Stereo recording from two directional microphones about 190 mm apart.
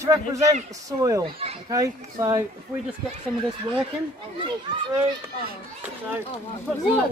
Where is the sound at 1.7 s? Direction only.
20° right (ahead or behind).